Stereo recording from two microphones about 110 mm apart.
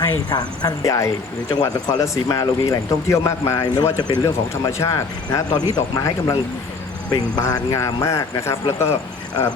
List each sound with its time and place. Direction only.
0.0 s speech: 40° left (ahead or behind); by 9.0 s 25° left (ahead or behind)